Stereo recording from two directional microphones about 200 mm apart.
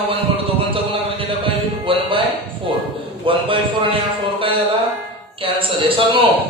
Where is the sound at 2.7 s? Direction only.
25° right (ahead or behind).